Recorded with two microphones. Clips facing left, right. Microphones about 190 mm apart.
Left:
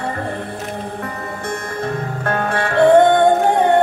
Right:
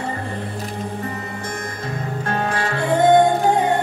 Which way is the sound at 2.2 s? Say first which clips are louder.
Left 2 dB; 60° left (ahead or behind).